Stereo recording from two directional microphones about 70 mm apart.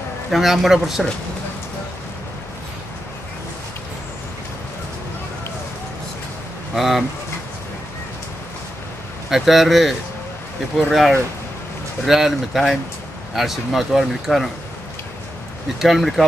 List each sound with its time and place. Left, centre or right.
0.3 s speech: centre
6.7 s speech: centre
9.3 s speech: centre
15.8 s speech: centre